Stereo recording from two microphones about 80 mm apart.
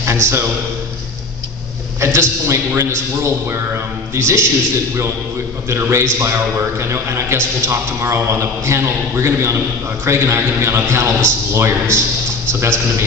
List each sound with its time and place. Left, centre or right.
0.0 s a man's voice: right
2.0 s a man's voice: right
5.7 s a man's voice: right